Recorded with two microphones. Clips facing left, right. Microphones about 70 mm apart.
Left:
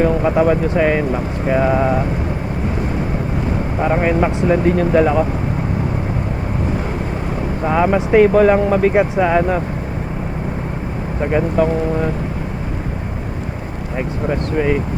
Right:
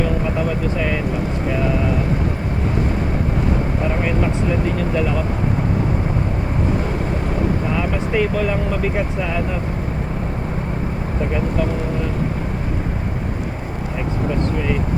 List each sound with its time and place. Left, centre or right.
0.0 s speech: left
3.8 s speech: left
7.7 s speech: left
11.3 s speech: left
14.3 s speech: left